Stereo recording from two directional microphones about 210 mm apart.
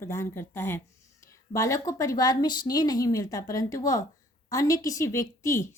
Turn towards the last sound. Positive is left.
turn(degrees=15)  # may be behind; listen again after turning